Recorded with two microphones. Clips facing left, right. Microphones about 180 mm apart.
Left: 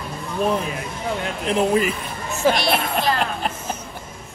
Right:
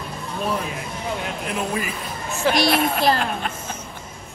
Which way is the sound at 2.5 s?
35° right (ahead or behind).